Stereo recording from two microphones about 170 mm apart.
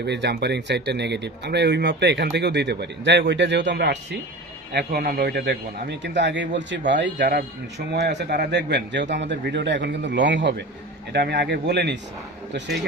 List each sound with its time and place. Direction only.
0.0 s speech: 80° right
4.7 s a man's voice: 70° right (ahead or behind); by 7.3 s 90° right
8.4 s a man's voice: 80° right
11.1 s speech: 80° right